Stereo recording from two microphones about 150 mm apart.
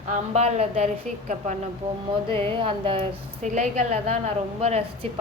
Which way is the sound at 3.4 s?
55° right (ahead or behind).